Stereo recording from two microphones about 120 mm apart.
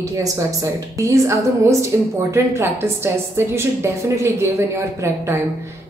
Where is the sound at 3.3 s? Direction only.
20° right (ahead or behind).